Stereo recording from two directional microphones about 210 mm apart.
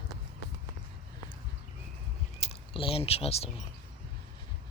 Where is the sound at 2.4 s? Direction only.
25° left (ahead or behind).